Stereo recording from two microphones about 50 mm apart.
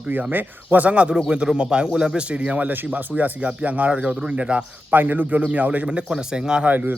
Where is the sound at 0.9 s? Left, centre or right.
Right.